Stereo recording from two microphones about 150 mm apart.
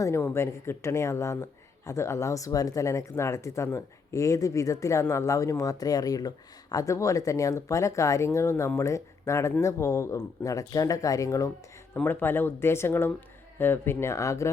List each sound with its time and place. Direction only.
0.0 s speech: 15° left (ahead or behind)